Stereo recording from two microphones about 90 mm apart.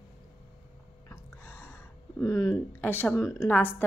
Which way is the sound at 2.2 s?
30° left (ahead or behind).